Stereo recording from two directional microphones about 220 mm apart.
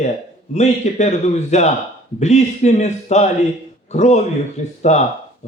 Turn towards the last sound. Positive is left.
turn(degrees=30)  # may be behind; listen again after turning